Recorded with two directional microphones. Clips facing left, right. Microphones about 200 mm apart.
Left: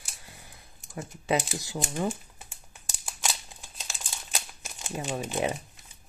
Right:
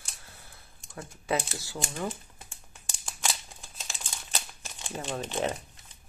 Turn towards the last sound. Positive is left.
turn(degrees=10)  # may be behind; listen again after turning